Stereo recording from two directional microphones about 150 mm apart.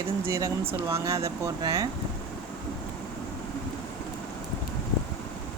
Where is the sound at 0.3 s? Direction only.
20° right (ahead or behind).